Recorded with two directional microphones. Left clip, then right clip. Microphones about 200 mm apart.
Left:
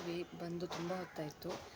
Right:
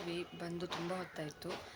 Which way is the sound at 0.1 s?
5° left (ahead or behind).